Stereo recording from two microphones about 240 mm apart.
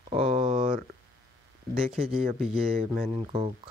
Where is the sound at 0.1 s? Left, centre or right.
Right.